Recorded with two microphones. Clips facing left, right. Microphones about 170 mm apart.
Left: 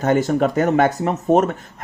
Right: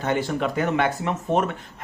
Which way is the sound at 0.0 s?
45° left (ahead or behind).